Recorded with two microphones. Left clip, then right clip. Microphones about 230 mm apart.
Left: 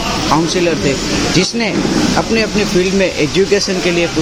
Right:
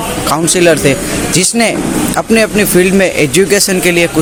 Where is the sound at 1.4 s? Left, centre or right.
Right.